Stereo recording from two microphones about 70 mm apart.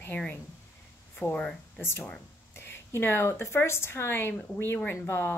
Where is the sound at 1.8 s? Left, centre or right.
Left.